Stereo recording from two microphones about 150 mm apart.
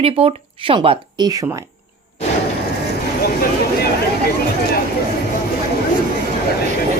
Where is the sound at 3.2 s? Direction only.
90° left.